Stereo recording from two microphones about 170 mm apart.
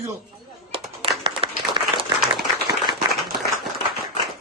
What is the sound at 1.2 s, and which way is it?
Applause, 25° right (ahead or behind).